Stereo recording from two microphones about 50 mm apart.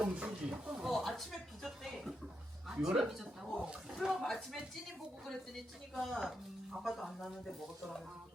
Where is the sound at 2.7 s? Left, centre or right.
Centre.